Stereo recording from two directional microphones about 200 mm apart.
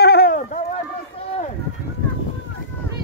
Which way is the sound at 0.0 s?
50° left (ahead or behind).